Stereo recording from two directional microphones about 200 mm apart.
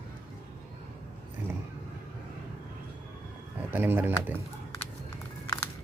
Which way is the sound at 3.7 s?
10° right (ahead or behind).